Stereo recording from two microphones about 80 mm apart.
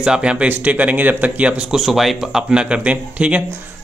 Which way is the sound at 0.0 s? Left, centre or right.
Centre.